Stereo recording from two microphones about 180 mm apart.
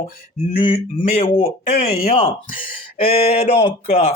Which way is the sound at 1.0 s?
50° left (ahead or behind).